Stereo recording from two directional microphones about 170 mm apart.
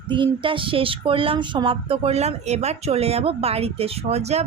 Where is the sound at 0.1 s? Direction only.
30° right (ahead or behind).